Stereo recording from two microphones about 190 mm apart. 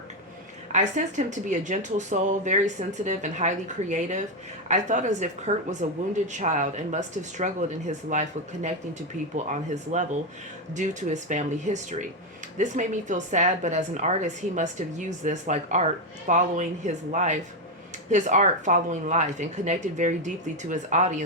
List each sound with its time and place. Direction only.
0.7 s a woman's voice: 40° right (ahead or behind)